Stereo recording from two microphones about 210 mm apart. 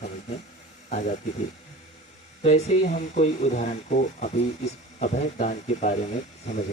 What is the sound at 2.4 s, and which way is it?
Speech, 30° left (ahead or behind).